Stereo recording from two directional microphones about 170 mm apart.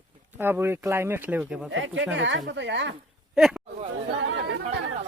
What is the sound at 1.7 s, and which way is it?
Speech, 90° right.